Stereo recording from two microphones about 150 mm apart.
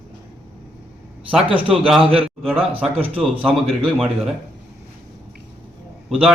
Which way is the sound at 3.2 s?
Centre (ahead or behind).